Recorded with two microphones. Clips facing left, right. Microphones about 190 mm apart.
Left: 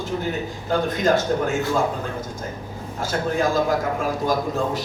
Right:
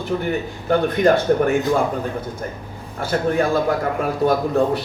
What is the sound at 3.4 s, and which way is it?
Speech, 60° right (ahead or behind).